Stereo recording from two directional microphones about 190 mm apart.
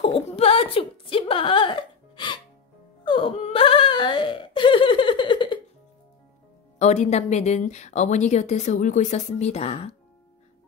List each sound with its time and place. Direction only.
0.0 s a sound: 30° left (ahead or behind)
3.1 s wail: 25° left (ahead or behind)
6.8 s a woman's voice: 35° left (ahead or behind)